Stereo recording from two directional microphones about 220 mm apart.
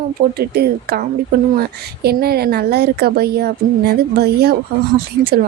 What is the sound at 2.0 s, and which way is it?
Speech, 45° right (ahead or behind).